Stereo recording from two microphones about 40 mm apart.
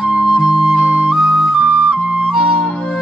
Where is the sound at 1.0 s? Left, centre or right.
Centre.